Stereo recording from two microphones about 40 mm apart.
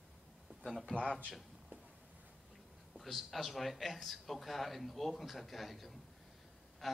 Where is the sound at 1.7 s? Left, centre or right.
Right.